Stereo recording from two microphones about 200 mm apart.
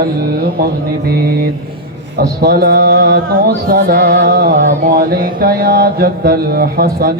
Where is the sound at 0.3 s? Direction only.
50° right (ahead or behind).